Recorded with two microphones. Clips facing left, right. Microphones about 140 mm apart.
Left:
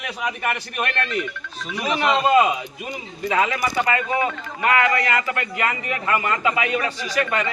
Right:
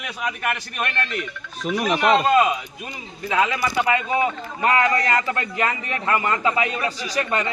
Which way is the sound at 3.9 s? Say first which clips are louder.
Right 1 dB; 20° right (ahead or behind).